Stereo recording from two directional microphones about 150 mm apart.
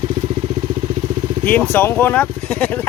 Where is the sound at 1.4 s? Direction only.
10° left (ahead or behind).